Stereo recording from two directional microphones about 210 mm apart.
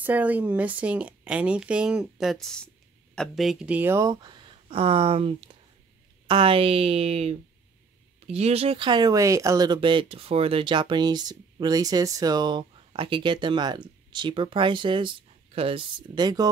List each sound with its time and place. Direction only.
0.0 s speech: 10° right (ahead or behind)